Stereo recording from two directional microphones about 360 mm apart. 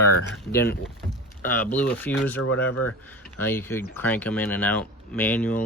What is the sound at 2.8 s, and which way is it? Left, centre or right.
Speech, left.